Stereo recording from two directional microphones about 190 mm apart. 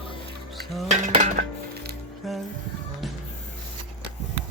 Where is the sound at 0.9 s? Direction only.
40° right (ahead or behind).